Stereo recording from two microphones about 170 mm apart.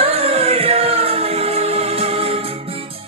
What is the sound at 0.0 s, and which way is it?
Music, 35° right (ahead or behind).